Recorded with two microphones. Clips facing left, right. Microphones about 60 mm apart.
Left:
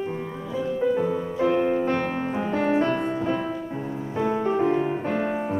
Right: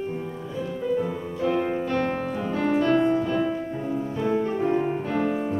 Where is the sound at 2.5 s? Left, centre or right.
Left.